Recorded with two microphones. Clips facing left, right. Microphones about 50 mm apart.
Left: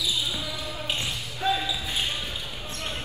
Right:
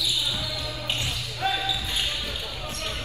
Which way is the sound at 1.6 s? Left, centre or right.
Left.